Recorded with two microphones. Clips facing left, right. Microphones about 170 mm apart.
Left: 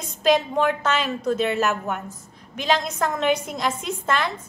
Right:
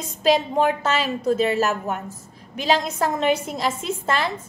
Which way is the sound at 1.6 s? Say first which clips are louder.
Right 1 dB; 35° right (ahead or behind).